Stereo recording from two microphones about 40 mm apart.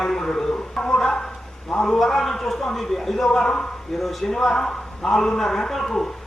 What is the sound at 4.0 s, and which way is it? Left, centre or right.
A man's voice, centre.